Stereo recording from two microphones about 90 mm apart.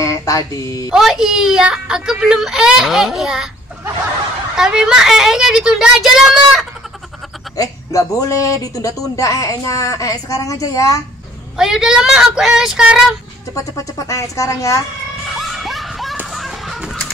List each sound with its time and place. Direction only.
0.0 s a sound: 35° left (ahead or behind)
0.9 s speech: 5° right (ahead or behind)
4.6 s speech: 10° right (ahead or behind)
7.5 s a woman's voice: 40° left (ahead or behind)
11.5 s speech: 5° right (ahead or behind)
13.7 s a woman's voice: 35° left (ahead or behind)
15.2 s children shouting: centre (ahead or behind)
16.3 s a sound: centre (ahead or behind)